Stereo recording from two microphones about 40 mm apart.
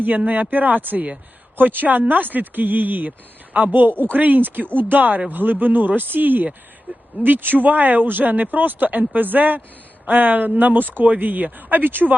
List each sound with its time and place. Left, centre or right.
0.3 s speech: right